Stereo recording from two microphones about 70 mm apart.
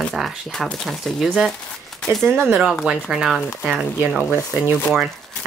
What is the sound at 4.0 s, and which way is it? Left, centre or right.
Speech, right.